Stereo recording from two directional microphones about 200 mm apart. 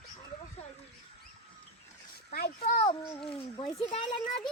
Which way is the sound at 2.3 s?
50° left (ahead or behind).